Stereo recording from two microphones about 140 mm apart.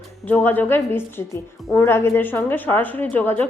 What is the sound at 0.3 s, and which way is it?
A woman's voice, 15° left (ahead or behind).